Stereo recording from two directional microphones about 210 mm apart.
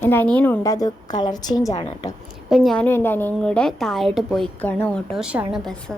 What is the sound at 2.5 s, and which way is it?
A woman's voice, centre (ahead or behind).